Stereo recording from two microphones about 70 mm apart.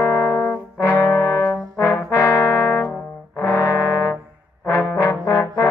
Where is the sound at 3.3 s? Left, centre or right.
Left.